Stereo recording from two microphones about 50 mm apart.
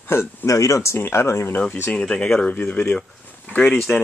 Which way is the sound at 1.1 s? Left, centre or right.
Left.